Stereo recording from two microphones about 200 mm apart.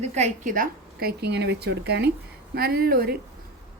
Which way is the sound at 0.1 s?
35° right (ahead or behind).